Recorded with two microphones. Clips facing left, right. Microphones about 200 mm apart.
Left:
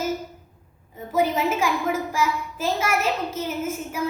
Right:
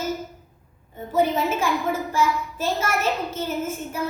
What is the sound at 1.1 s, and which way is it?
A woman's voice, 10° left (ahead or behind).